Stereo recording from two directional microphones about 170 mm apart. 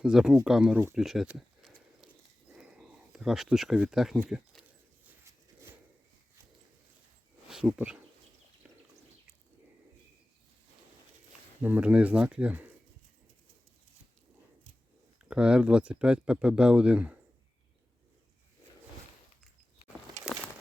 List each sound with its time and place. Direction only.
0.0 s speech: 5° right (ahead or behind)
2.5 s a sound: 5° right (ahead or behind)
7.5 s speech: 5° right (ahead or behind)
8.7 s a sound: 10° right (ahead or behind)
11.6 s speech: 10° right (ahead or behind)
15.2 s speech: 5° right (ahead or behind)